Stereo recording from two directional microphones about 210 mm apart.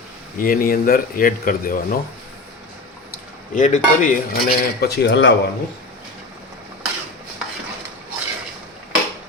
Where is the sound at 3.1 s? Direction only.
35° left (ahead or behind); by 5.3 s 60° left (ahead or behind).